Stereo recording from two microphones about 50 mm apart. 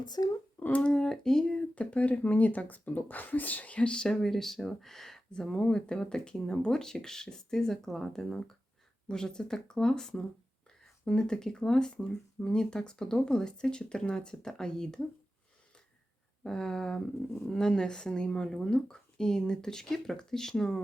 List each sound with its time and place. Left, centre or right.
0.8 s speech: centre
1.7 s speech: left
4.1 s speech: centre
16.4 s speech: centre